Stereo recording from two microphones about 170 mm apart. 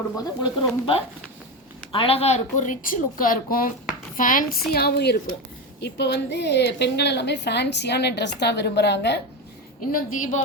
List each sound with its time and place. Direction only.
0.2 s a woman's voice: 30° left (ahead or behind); by 5.3 s 65° left (ahead or behind)
5.8 s a woman's voice: 85° left
9.8 s a woman's voice: 55° left (ahead or behind)